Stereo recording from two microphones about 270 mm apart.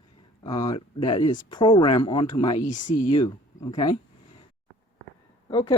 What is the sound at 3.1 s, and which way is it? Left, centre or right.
Speech, centre.